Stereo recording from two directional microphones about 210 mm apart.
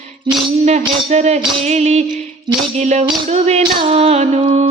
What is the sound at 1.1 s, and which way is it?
Music, 35° right (ahead or behind).